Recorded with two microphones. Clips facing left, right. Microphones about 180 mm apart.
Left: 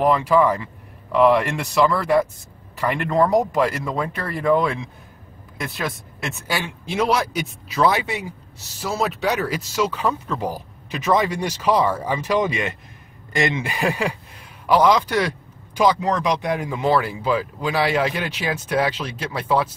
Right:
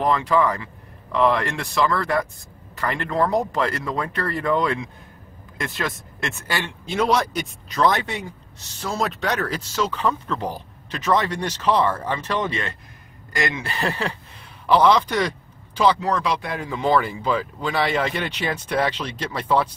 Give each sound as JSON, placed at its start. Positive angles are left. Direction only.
{"t": 0.0, "sound": "speech", "side_deg": 10}
{"t": 13.3, "sound": "speech", "side_deg": 25}
{"t": 13.7, "sound": "speech", "side_deg": 10}